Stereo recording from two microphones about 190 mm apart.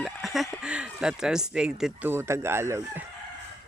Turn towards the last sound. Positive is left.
turn(degrees=-15)  # may be behind; listen again after turning